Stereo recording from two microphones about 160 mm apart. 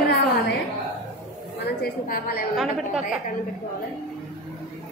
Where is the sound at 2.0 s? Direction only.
60° left (ahead or behind).